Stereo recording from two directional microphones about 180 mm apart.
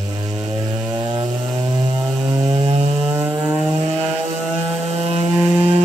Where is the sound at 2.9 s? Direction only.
5° right (ahead or behind).